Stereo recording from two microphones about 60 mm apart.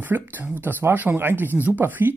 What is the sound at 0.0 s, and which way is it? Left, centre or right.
Speech, right.